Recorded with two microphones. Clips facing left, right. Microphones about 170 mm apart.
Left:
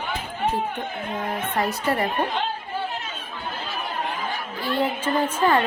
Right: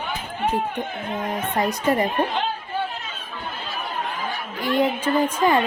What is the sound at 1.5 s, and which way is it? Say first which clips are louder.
Speech: right 3 dB; 15° right (ahead or behind).